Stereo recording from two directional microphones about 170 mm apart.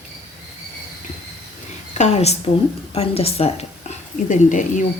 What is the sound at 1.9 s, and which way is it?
A woman's voice, 40° left (ahead or behind).